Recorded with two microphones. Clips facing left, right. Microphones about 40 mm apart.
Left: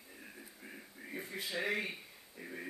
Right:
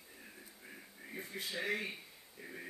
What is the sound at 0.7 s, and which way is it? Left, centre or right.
A man's voice, centre.